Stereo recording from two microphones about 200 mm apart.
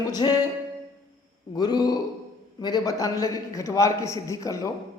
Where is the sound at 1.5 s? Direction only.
20° left (ahead or behind).